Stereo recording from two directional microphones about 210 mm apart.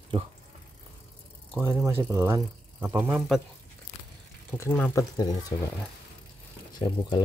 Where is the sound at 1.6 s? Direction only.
10° right (ahead or behind).